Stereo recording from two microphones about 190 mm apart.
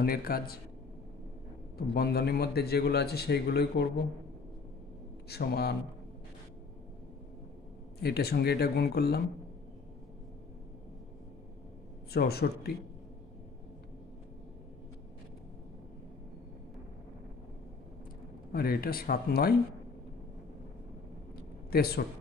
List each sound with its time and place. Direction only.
0.0 s speech: 50° left (ahead or behind)
2.0 s a man's voice: 55° left (ahead or behind)
5.3 s a man's voice: 55° left (ahead or behind)
8.0 s a man's voice: 55° left (ahead or behind)
12.1 s a man's voice: 55° left (ahead or behind)
18.5 s speech: 50° left (ahead or behind)
21.6 s a man's voice: 55° left (ahead or behind)